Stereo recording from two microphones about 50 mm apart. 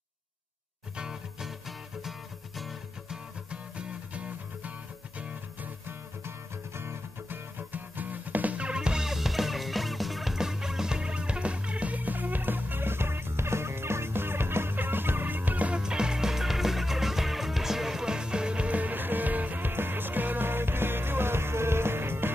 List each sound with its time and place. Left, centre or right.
0.9 s music: centre
1.7 s music: centre
3.1 s music: right
5.9 s music: right; by 9.1 s centre
9.1 s music: centre
10.3 s music: centre; by 15.8 s right
15.8 s music: centre; by 22.3 s right